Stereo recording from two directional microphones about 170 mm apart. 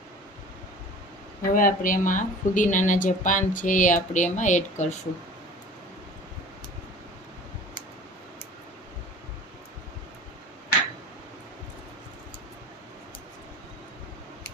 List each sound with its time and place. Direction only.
1.4 s speech: 55° left (ahead or behind)